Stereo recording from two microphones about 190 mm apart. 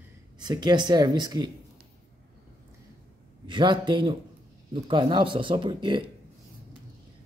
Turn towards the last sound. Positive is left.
turn(degrees=-25)  # may be behind; listen again after turning